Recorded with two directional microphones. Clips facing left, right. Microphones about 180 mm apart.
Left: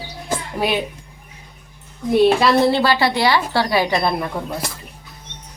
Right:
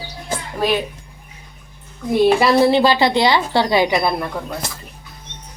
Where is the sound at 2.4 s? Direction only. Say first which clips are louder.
Right 2 dB; 15° right (ahead or behind).